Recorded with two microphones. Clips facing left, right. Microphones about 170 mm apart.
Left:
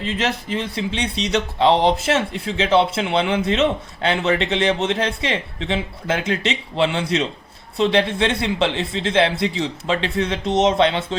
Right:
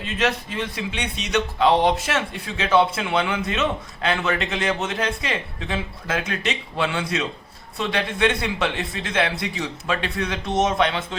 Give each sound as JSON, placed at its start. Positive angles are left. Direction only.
{"t": 0.5, "sound": "speech", "side_deg": 25}